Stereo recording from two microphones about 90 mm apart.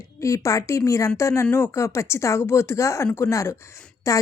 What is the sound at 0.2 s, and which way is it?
Speech, 35° left (ahead or behind).